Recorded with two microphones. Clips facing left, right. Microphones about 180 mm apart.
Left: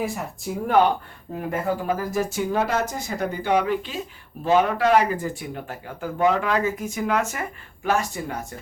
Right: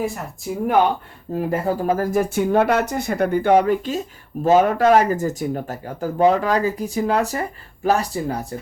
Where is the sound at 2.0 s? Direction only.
55° right (ahead or behind).